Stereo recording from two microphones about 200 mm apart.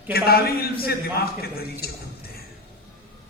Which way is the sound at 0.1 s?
50° left (ahead or behind).